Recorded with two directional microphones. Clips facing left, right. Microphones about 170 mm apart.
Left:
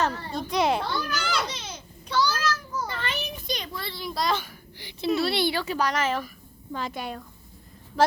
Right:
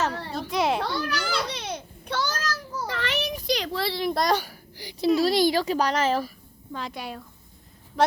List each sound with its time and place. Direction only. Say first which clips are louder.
0.1 s a sound: right 2 dB; 70° right (ahead or behind)
0.3 s children playing: left 1 dB; centre (ahead or behind)
0.8 s children playing: right 1 dB; 70° right (ahead or behind); by 2.8 s 40° right (ahead or behind)
2.8 s a sound: right 8 dB; 80° right; by 6.3 s 35° right (ahead or behind)
6.7 s a woman's voice: left 2 dB; centre (ahead or behind)
8.0 s vehicle: even; centre (ahead or behind)